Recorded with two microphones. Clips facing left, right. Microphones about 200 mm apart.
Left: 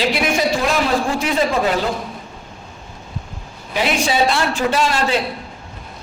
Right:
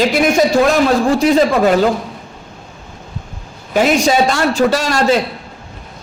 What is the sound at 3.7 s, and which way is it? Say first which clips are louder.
A man's voice: right 7 dB; 45° right (ahead or behind).